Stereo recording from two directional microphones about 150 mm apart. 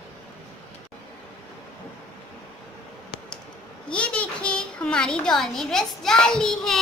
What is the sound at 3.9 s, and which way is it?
A child's voice, 5° left (ahead or behind).